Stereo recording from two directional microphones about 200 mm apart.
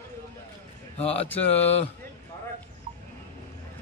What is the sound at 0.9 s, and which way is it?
Speech, 30° left (ahead or behind).